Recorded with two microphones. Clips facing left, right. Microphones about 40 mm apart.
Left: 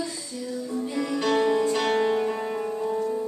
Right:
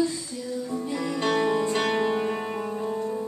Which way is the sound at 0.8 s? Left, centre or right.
Centre.